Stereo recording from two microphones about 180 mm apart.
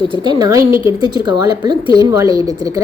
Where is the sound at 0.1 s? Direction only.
25° right (ahead or behind).